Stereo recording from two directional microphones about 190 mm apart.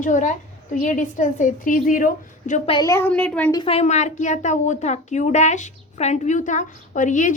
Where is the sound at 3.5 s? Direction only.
30° left (ahead or behind).